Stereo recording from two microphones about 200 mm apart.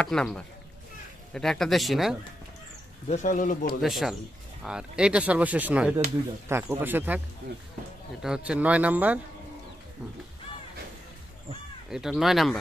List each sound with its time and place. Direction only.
0.0 s speech: 5° left (ahead or behind)
3.1 s speech: 40° left (ahead or behind)
3.8 s speech: centre (ahead or behind)
8.2 s speech: 5° right (ahead or behind)
11.9 s speech: centre (ahead or behind)